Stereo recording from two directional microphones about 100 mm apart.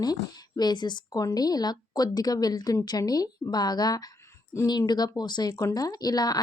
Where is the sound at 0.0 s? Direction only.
40° left (ahead or behind).